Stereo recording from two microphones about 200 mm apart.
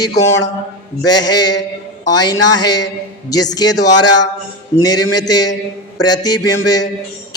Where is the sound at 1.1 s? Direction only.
20° left (ahead or behind).